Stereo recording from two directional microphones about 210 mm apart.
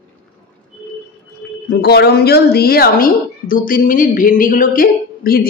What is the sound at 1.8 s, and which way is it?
A woman's voice, 50° left (ahead or behind).